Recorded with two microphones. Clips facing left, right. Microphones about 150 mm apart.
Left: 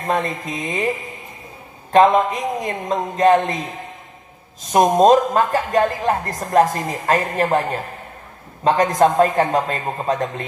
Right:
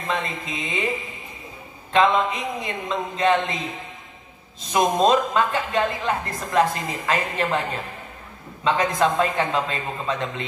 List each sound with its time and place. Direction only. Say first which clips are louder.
0.0 s speech: left 6 dB; 40° left (ahead or behind)
1.9 s speech: left 5 dB; 40° left (ahead or behind)
4.7 s speech: left 6 dB; 40° left (ahead or behind)